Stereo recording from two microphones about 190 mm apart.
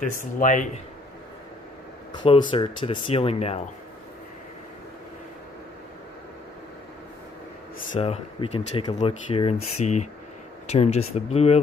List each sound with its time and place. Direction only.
0.1 s speech: 45° left (ahead or behind)
2.1 s speech: 25° left (ahead or behind)
7.9 s speech: 30° left (ahead or behind)